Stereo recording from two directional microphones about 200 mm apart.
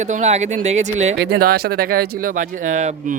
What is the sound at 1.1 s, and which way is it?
Speech, 55° right (ahead or behind).